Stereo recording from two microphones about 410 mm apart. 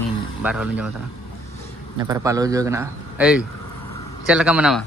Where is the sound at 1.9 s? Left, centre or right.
Centre.